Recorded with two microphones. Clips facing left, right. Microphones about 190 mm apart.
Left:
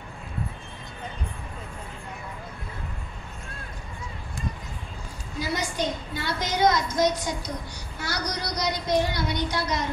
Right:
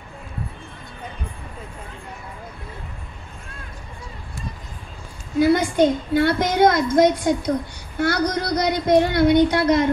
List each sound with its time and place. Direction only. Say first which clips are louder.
5.4 s a woman's voice: right 12 dB; 55° right (ahead or behind)